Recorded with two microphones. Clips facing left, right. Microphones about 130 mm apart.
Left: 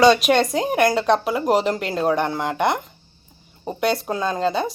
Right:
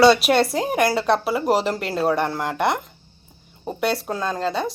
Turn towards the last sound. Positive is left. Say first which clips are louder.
# left 2 dB
turn(degrees=0)  # may be behind; listen again after turning